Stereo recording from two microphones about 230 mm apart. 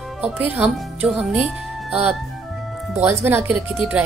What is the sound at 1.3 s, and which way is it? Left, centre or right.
Speech, centre.